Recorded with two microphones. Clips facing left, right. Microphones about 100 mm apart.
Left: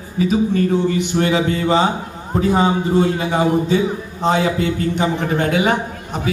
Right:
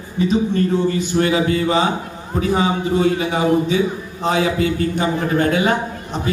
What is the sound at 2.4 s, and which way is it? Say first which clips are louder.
A man's voice: left 2 dB; 30° left (ahead or behind).